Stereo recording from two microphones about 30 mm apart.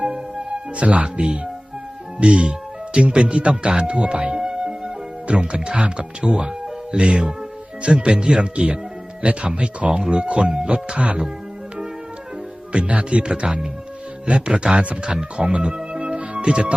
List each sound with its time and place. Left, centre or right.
0.0 s music: right
0.8 s speech: right
4.4 s music: right
5.3 s speech: right
8.1 s speech: right
12.7 s speech: right
15.5 s music: right